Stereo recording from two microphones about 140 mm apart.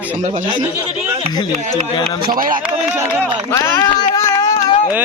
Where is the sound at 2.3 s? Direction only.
80° right.